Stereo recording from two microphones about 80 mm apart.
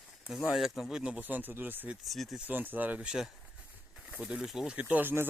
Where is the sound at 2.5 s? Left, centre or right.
Right.